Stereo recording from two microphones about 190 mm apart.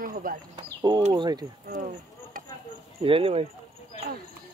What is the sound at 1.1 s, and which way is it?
Speech, 20° right (ahead or behind).